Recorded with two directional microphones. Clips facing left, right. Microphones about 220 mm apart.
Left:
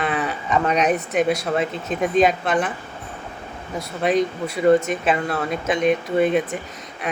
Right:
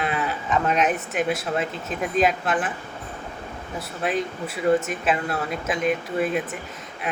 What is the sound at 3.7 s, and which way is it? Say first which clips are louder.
Speech: left 6 dB; 5° right (ahead or behind).